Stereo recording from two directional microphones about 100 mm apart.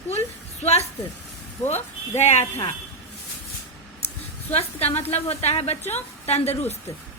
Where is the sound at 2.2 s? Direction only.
90° left.